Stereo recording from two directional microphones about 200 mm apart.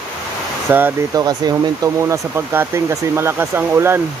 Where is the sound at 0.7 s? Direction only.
10° right (ahead or behind).